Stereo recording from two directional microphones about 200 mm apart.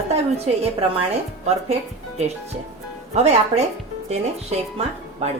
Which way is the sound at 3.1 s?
35° right (ahead or behind).